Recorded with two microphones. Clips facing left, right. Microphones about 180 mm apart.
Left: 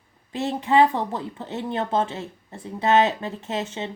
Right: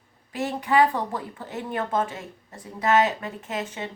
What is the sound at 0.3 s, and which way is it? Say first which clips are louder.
Speech: left 2 dB; 25° left (ahead or behind).